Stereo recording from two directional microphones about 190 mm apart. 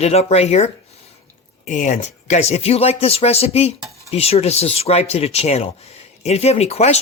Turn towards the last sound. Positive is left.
turn(degrees=35)  # may be behind; listen again after turning